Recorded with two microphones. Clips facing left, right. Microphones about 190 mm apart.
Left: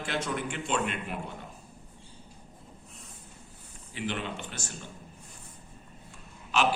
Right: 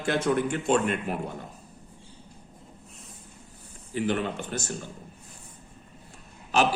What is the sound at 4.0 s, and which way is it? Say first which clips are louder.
Speech: right 7 dB; 45° right (ahead or behind).